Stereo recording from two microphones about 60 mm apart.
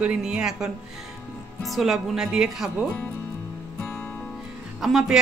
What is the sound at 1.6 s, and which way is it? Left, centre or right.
Speech, centre.